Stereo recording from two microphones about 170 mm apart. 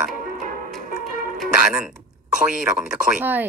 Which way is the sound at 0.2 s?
55° right (ahead or behind).